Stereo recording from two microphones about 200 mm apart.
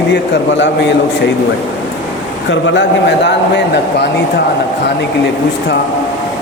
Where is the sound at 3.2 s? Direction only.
60° left (ahead or behind).